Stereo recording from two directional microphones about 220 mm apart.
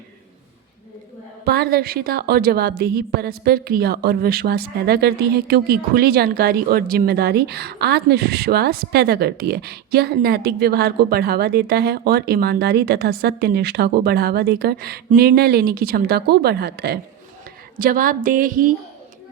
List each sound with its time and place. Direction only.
1.5 s a woman's voice: 45° right (ahead or behind)